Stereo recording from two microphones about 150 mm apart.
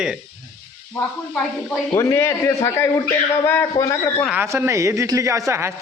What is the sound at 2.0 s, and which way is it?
A man's voice, 20° left (ahead or behind).